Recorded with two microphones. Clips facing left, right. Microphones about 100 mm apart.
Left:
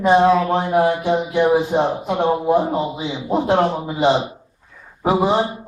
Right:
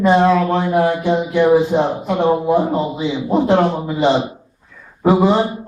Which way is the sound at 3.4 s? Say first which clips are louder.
Right 3 dB; 15° left (ahead or behind).